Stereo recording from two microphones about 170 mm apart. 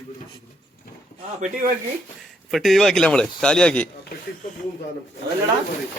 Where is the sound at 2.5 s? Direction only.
Centre (ahead or behind).